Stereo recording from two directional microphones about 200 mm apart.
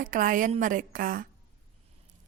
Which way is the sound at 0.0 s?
40° right (ahead or behind).